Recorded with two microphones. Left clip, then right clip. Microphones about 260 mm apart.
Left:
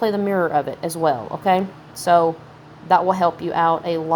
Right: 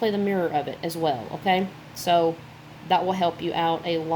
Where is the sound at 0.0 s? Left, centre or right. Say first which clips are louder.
Left 5 dB; centre.